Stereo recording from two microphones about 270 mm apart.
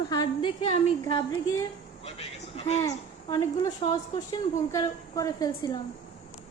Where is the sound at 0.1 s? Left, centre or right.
Centre.